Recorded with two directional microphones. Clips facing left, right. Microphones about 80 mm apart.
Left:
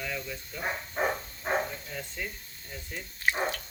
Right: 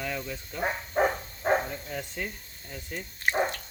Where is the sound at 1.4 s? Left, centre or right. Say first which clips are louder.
Right 5 dB; right.